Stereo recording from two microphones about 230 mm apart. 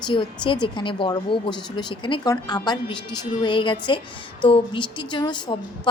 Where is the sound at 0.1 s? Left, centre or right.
Left.